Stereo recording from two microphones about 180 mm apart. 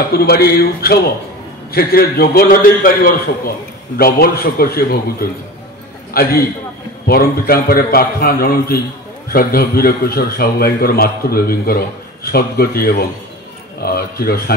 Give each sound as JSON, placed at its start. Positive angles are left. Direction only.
{"t": 0.1, "sound": "a man's voice", "side_deg": 60}